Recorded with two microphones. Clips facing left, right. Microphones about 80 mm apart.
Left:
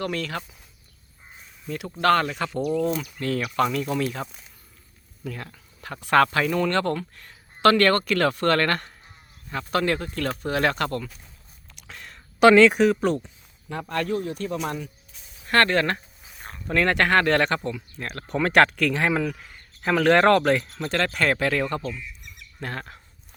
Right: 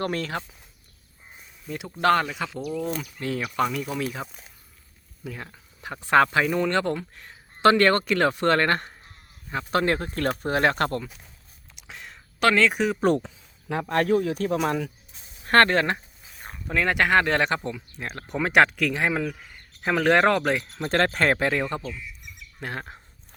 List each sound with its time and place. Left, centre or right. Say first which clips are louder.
0.0 s speech: right 1 dB; right
1.6 s speech: even; centre
2.3 s speech: left 5 dB; centre
3.2 s speech: left 1 dB; centre
11.7 s a sound: even; centre
12.4 s speech: left 7 dB; centre
12.6 s speech: left 5 dB; centre
13.2 s speech: right 5 dB; right
15.4 s speech: right 2 dB; right
16.3 s speech: left 2 dB; centre
20.9 s speech: right 2 dB; right; by 23.0 s centre